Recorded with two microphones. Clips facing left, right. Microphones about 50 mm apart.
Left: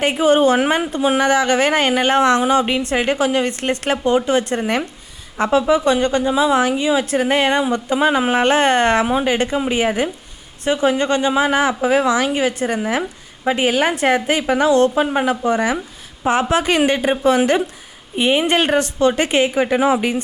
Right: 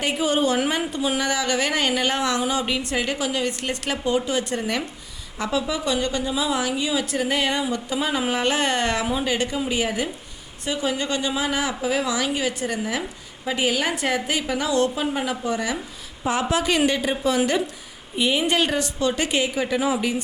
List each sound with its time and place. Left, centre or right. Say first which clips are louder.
0.0 s speech: left 8 dB; left